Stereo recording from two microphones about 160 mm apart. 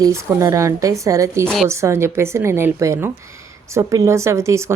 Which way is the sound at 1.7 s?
15° right (ahead or behind).